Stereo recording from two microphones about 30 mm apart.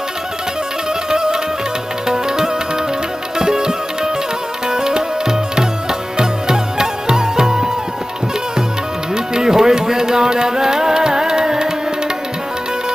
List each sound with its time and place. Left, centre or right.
1.1 s music: right
9.1 s music: right